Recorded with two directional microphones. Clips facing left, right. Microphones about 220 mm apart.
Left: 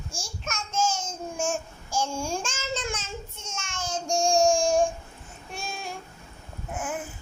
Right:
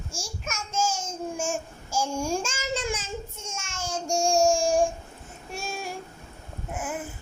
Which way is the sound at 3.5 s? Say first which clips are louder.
Even; 10° right (ahead or behind).